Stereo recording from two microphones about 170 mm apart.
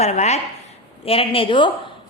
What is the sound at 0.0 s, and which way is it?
A woman's voice, 40° left (ahead or behind).